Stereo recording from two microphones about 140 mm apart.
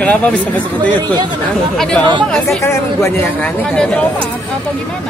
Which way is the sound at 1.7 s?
5° left (ahead or behind).